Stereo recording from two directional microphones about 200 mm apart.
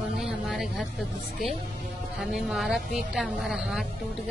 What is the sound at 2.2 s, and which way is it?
A woman's voice, centre (ahead or behind).